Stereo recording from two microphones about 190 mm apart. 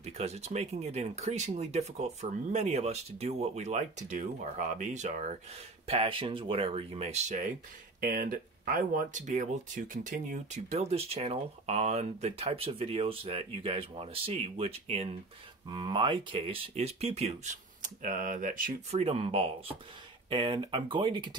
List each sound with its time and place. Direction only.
0.0 s speech: 35° right (ahead or behind)
8.0 s speech: 50° right (ahead or behind)
18.9 s speech: 30° right (ahead or behind)